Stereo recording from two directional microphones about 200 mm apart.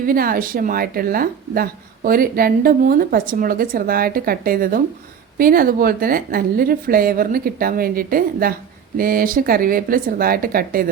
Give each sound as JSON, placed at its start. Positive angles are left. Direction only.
{"t": 0.0, "sound": "a woman's voice", "side_deg": -45}